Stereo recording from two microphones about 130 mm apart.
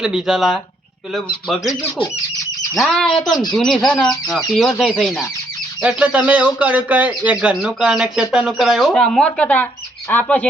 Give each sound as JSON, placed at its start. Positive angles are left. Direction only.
{"t": 0.0, "sound": "speech", "side_deg": -5}
{"t": 2.7, "sound": "speech", "side_deg": 0}
{"t": 6.0, "sound": "speech", "side_deg": -10}